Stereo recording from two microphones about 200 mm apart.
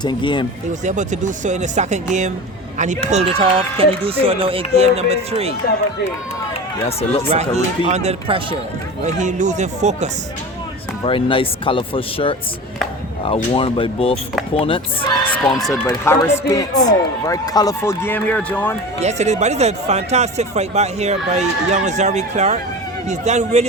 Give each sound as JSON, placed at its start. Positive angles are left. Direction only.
{"t": 0.0, "sound": "speech", "side_deg": 25}
{"t": 0.9, "sound": "speech", "side_deg": -35}
{"t": 7.3, "sound": "speech", "side_deg": -35}
{"t": 11.0, "sound": "speech", "side_deg": 25}
{"t": 15.7, "sound": "speech", "side_deg": 15}
{"t": 18.9, "sound": "speech", "side_deg": -35}